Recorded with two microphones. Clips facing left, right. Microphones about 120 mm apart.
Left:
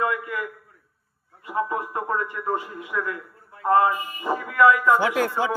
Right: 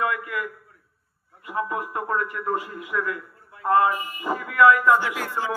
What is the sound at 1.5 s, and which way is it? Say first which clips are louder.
A man's voice: left 2 dB; 25° left (ahead or behind).